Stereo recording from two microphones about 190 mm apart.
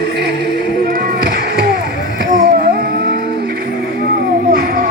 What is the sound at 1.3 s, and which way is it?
Music, 55° right (ahead or behind).